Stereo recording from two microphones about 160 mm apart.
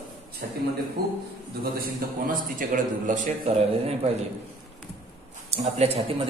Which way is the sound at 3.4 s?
40° right (ahead or behind).